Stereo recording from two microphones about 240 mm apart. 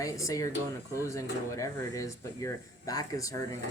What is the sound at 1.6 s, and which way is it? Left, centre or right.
Speech, centre.